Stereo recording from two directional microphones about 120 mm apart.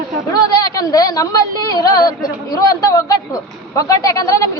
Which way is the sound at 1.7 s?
35° left (ahead or behind).